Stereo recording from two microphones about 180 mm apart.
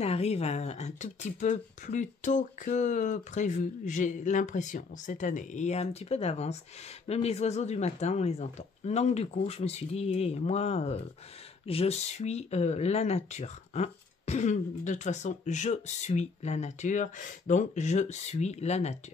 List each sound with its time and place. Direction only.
0.0 s speech: 35° left (ahead or behind)